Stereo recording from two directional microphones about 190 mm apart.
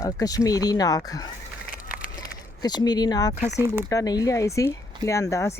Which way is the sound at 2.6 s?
20° left (ahead or behind).